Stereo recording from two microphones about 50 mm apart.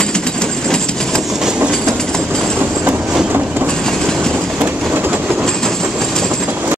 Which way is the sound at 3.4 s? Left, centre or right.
Right.